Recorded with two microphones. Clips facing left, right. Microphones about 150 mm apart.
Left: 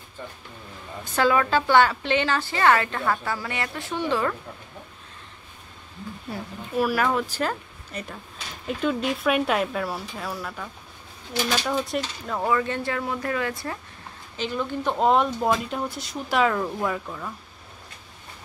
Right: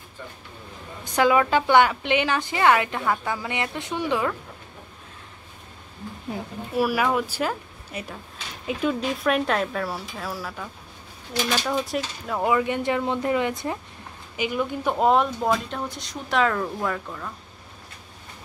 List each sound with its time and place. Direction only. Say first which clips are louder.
1.1 s a woman's voice: right 2 dB; 15° right (ahead or behind)
6.3 s a woman's voice: right 1 dB; 10° right (ahead or behind); by 17.3 s 5° left (ahead or behind)